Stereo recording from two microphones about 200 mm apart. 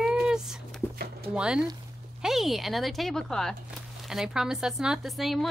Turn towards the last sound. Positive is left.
turn(degrees=0)  # may be behind; listen again after turning